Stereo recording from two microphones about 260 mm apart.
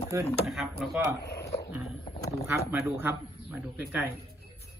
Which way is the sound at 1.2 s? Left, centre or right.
Left.